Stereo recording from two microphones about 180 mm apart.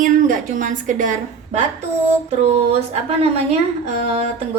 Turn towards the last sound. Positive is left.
turn(degrees=-35)  # may be behind; listen again after turning